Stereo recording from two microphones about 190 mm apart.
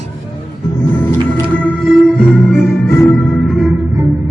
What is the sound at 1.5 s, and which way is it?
Music, 5° left (ahead or behind).